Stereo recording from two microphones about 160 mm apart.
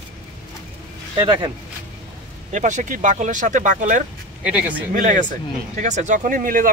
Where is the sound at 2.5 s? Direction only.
50° right (ahead or behind).